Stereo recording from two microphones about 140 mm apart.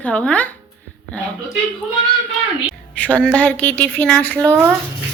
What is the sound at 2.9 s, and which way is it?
A woman's voice, 10° left (ahead or behind).